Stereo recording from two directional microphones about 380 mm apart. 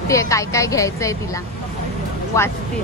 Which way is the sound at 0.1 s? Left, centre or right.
Centre.